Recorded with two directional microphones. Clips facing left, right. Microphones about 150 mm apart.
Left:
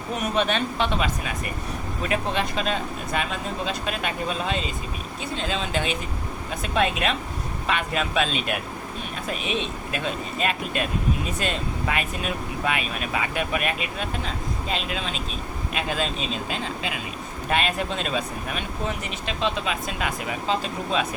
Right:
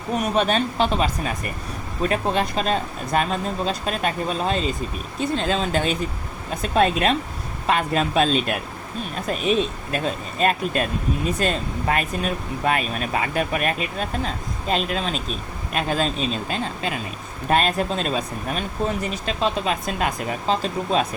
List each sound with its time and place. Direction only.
0.3 s speech: 40° right (ahead or behind)